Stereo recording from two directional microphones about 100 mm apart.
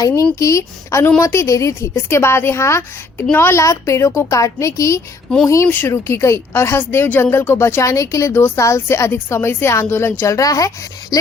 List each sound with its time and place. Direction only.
0.2 s a woman's voice: 30° left (ahead or behind)
5.6 s a woman's voice: 20° left (ahead or behind); by 11.3 s 40° left (ahead or behind)